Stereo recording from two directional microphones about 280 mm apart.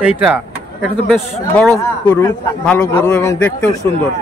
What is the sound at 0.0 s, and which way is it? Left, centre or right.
Speech, centre.